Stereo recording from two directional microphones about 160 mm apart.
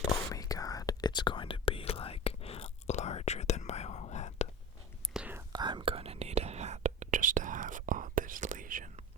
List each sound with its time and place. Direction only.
0.1 s whispering: 20° left (ahead or behind); by 4.4 s 45° left (ahead or behind)
5.1 s whispering: 10° right (ahead or behind)
5.5 s whispering: 25° right (ahead or behind); by 8.9 s 55° right (ahead or behind)